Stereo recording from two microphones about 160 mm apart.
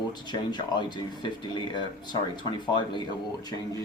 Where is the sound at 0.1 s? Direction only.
25° left (ahead or behind).